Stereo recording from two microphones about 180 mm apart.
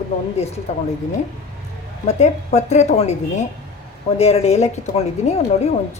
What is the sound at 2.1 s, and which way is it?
Speech, 40° left (ahead or behind).